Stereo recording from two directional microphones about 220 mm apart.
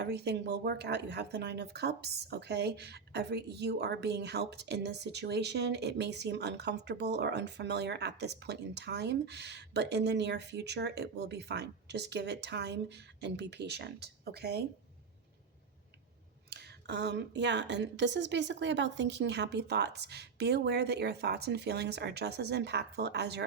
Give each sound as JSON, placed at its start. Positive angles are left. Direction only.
{"t": 0.0, "sound": "speech", "side_deg": -50}
{"t": 16.5, "sound": "speech", "side_deg": -50}